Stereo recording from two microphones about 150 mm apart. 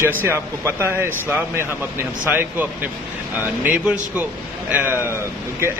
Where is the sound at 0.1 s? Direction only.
15° right (ahead or behind).